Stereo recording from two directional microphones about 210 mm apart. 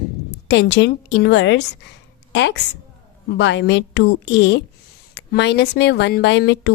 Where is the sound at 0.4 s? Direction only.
55° left (ahead or behind).